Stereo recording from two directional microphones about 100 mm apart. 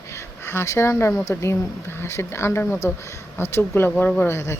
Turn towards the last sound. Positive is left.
turn(degrees=25)  # may be behind; listen again after turning